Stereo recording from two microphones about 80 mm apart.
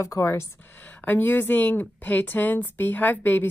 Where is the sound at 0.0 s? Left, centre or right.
Left.